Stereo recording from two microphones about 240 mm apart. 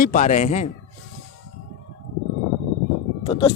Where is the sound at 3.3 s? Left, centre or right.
Left.